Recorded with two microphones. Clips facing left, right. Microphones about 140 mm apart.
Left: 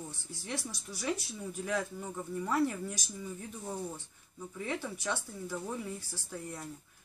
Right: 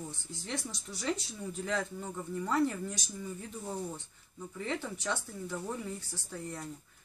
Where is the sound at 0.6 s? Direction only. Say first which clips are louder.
Even; 20° right (ahead or behind).